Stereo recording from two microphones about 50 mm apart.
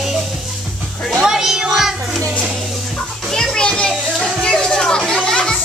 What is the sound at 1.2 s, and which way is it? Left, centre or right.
Music, centre.